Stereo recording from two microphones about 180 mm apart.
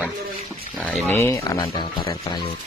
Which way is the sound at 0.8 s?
10° left (ahead or behind).